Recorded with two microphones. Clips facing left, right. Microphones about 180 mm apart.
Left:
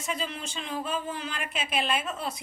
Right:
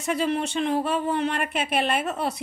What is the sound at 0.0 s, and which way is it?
Speech, 65° right (ahead or behind).